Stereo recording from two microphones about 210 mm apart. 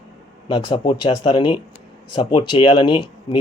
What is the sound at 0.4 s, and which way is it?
Speech, 20° left (ahead or behind).